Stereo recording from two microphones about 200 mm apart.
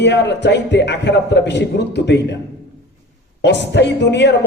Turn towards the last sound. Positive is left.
turn(degrees=60)  # may be behind; listen again after turning